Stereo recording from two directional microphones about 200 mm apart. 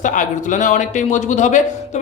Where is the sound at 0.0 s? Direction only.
40° left (ahead or behind).